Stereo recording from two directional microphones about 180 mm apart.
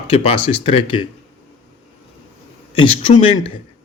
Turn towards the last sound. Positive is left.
turn(degrees=30)  # may be behind; listen again after turning